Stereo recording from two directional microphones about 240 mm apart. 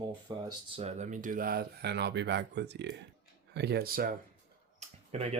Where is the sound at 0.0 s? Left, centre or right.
Centre; by 4.1 s right.